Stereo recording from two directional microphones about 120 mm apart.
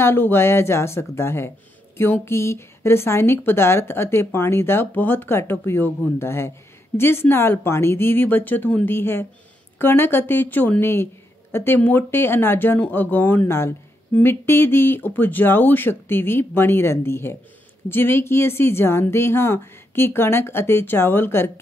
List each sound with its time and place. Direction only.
0.0 s a woman's voice: 20° left (ahead or behind)